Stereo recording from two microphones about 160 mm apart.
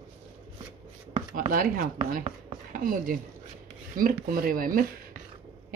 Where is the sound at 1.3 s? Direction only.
60° right (ahead or behind).